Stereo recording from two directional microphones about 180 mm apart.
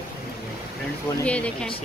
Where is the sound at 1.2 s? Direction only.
5° left (ahead or behind).